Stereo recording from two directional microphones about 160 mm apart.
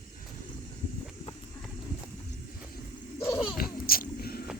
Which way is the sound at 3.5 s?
65° left (ahead or behind).